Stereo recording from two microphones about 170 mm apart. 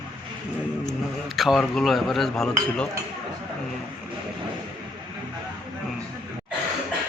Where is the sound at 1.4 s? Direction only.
Centre (ahead or behind).